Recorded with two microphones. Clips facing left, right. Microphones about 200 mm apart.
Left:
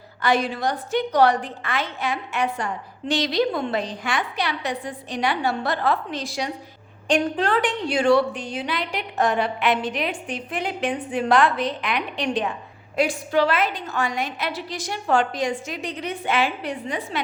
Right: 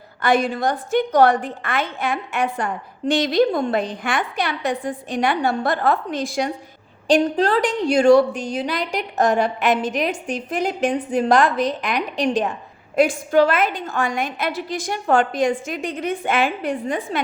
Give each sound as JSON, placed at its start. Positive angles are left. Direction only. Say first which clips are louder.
{"t": 0.2, "sound": "a woman's voice", "louder": "right 3 dB", "side_deg": -50}
{"t": 7.1, "sound": "a woman's voice", "louder": "right 4 dB", "side_deg": -35}